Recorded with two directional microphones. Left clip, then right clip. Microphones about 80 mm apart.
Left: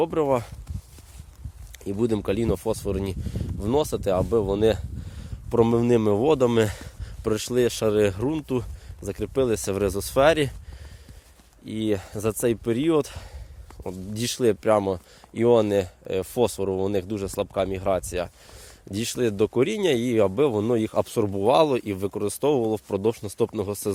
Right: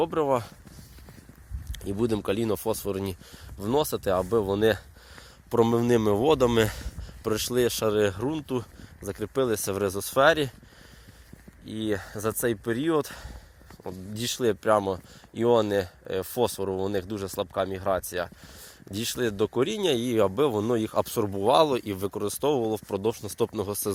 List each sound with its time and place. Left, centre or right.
0.0 s speech: left
1.7 s speech: centre
4.2 s speech: centre
6.8 s speech: left
7.9 s speech: left
11.6 s speech: left
14.3 s speech: left
16.6 s speech: left
21.8 s speech: left
22.2 s speech: left
23.5 s speech: left